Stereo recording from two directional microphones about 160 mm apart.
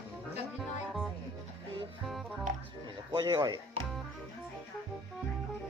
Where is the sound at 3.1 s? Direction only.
25° right (ahead or behind).